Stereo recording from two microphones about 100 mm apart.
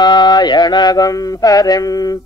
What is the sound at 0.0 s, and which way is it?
Mantra, 45° left (ahead or behind).